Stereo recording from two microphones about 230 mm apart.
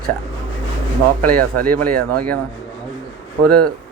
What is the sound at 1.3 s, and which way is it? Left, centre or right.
Speech, right.